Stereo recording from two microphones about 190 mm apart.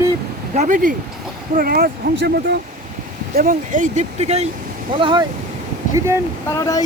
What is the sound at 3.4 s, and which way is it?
Speech, 45° right (ahead or behind).